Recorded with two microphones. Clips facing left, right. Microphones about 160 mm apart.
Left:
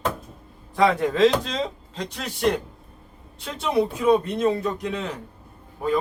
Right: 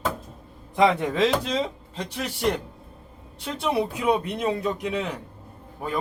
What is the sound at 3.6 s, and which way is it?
Speech, 10° right (ahead or behind).